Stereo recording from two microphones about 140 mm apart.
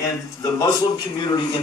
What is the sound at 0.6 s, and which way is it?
A man's voice, 30° left (ahead or behind).